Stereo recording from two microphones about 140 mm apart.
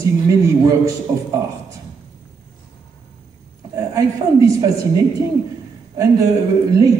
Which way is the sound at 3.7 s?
25° right (ahead or behind).